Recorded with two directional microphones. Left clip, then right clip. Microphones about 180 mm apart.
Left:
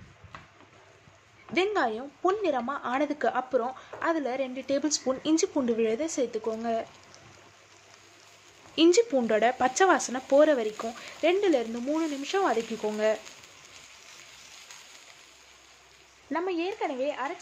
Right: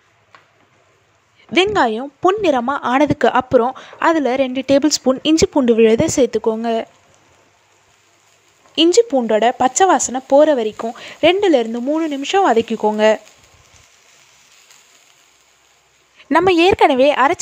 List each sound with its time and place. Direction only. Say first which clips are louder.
1.5 s a woman's voice: right 12 dB; 50° right (ahead or behind)
8.7 s speech: right 9 dB; 35° right (ahead or behind); by 13.2 s 50° right (ahead or behind)
16.3 s speech: right 18 dB; 70° right (ahead or behind)